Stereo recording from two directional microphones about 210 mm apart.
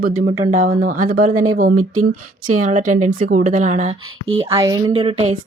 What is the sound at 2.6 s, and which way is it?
Speech, 35° right (ahead or behind).